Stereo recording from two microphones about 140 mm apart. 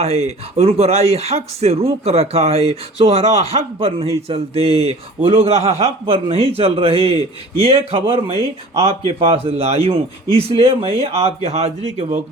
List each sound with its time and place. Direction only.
0.0 s speech: 50° right (ahead or behind)